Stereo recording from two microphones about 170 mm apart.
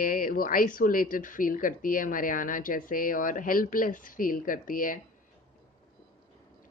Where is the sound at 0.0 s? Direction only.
55° left (ahead or behind).